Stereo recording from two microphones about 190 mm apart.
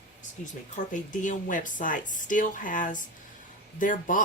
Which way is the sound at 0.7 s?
40° left (ahead or behind).